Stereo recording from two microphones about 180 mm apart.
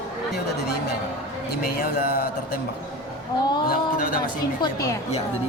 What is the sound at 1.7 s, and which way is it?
Speech, 60° left (ahead or behind).